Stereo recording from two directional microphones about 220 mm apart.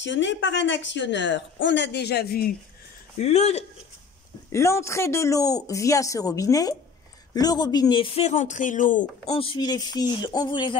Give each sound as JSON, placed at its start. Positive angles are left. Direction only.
{"t": 0.0, "sound": "speech", "side_deg": 55}
{"t": 3.2, "sound": "speech", "side_deg": 30}
{"t": 4.5, "sound": "speech", "side_deg": 10}
{"t": 9.3, "sound": "speech", "side_deg": 25}